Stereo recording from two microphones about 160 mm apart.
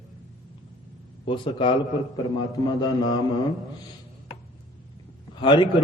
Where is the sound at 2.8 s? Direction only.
25° left (ahead or behind).